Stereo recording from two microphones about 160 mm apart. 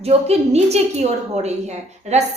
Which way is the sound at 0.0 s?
40° right (ahead or behind).